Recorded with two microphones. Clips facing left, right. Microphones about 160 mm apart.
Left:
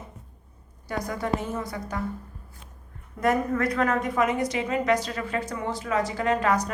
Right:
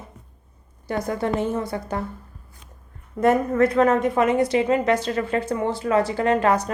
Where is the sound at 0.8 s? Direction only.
25° right (ahead or behind).